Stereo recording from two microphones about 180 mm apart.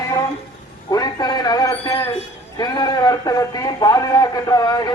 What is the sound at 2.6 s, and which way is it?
A man's voice, 20° left (ahead or behind).